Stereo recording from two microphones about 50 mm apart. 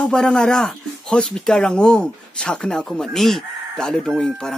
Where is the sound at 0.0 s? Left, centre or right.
Centre.